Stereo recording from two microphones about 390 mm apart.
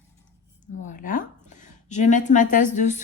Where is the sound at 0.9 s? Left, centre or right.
Centre.